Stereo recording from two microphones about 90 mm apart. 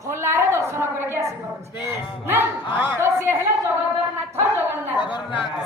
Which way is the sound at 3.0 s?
30° right (ahead or behind).